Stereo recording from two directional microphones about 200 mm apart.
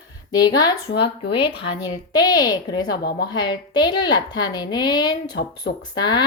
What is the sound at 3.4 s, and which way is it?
A woman's voice, 20° left (ahead or behind).